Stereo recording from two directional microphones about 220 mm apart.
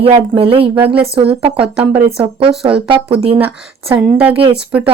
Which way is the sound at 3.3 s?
10° right (ahead or behind).